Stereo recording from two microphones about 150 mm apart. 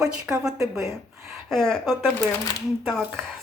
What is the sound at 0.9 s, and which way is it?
Speech, 20° right (ahead or behind).